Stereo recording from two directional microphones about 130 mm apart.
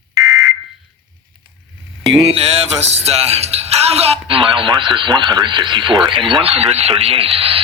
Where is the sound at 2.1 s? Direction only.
5° right (ahead or behind).